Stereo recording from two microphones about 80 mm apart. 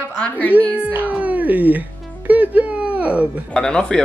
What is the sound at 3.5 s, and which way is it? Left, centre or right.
Speech, centre.